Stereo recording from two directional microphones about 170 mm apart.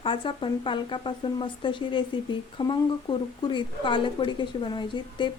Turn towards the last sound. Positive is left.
turn(degrees=25)  # may be behind; listen again after turning